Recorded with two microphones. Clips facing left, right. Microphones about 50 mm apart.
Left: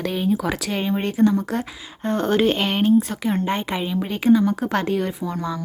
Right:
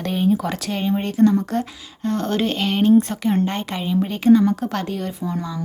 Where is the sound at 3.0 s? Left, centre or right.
Centre.